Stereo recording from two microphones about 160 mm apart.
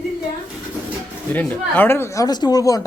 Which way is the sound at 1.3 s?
15° left (ahead or behind).